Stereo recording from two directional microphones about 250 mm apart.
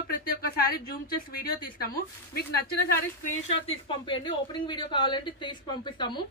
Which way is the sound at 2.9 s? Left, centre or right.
Left.